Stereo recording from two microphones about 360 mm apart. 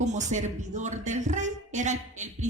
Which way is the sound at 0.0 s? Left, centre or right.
Centre.